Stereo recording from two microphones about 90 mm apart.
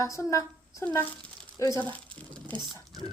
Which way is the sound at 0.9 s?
15° left (ahead or behind).